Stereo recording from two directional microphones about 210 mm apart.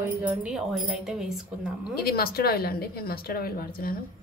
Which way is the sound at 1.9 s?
45° left (ahead or behind).